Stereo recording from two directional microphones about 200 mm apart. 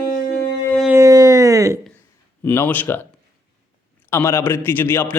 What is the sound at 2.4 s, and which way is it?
Speech, 10° left (ahead or behind).